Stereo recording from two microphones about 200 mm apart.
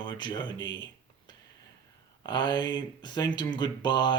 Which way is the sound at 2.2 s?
20° left (ahead or behind).